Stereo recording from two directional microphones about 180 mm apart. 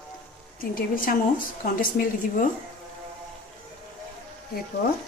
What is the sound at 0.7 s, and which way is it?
A woman's voice, 50° left (ahead or behind).